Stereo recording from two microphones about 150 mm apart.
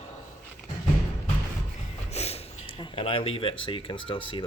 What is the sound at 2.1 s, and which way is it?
Speech, 45° left (ahead or behind).